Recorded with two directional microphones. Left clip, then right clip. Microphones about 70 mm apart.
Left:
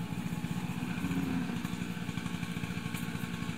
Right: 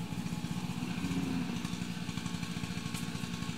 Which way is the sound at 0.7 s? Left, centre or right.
Right.